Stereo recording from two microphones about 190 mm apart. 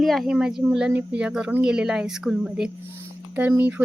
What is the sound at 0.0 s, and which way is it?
Speech, centre (ahead or behind).